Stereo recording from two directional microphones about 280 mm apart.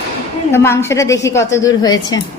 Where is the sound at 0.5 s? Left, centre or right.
Centre.